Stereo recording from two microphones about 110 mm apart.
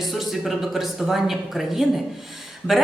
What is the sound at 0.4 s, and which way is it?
A woman's voice, centre (ahead or behind).